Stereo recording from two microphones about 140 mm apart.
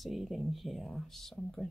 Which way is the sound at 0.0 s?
Centre (ahead or behind).